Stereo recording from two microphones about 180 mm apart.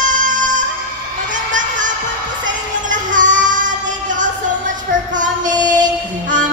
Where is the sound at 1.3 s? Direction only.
45° right (ahead or behind).